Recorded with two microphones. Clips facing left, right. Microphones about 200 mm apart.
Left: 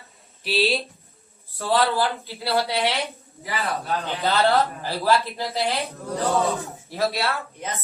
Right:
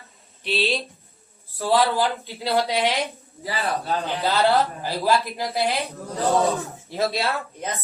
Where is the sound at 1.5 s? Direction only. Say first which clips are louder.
Right 1 dB; 15° right (ahead or behind).